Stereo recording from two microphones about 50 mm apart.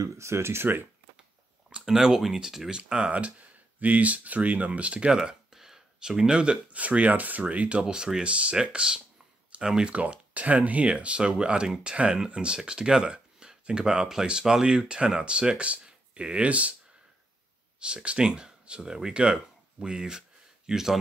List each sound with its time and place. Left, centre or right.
0.2 s speech: right
1.9 s speech: centre
2.9 s speech: right
5.1 s speech: centre; by 7.8 s right
7.8 s speech: centre
9.9 s speech: right
17.7 s speech: centre